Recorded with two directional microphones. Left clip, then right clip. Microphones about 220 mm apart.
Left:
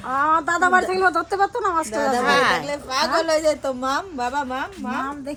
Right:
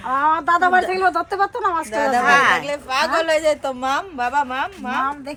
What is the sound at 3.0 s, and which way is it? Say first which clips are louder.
A woman's voice: right 1 dB; 40° right (ahead or behind).